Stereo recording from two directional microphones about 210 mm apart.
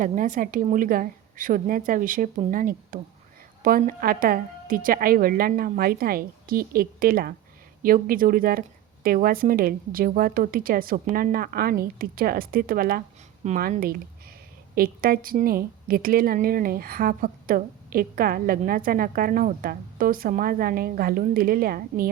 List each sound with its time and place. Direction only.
0.0 s a woman's voice: 40° right (ahead or behind)